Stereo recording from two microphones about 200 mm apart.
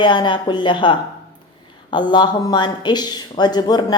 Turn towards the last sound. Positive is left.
turn(degrees=20)  # may be behind; listen again after turning